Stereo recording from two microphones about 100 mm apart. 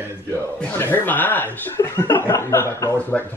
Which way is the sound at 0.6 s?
20° left (ahead or behind).